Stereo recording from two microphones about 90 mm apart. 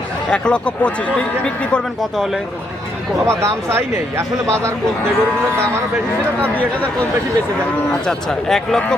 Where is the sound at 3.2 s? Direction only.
30° right (ahead or behind).